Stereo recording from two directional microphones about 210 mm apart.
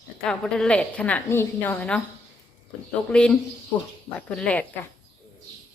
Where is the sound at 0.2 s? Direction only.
5° left (ahead or behind).